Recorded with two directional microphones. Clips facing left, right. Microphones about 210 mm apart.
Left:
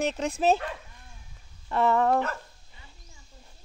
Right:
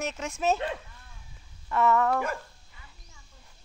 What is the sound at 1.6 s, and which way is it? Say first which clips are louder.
Speech: left 1 dB; 30° left (ahead or behind).